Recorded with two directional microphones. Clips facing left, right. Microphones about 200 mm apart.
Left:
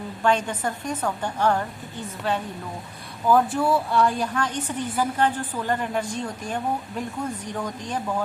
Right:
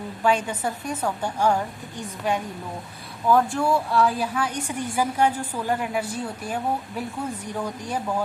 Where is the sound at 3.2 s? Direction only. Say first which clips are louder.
Even; centre (ahead or behind).